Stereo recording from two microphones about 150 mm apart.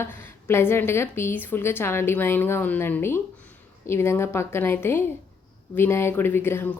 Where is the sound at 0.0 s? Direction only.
15° left (ahead or behind).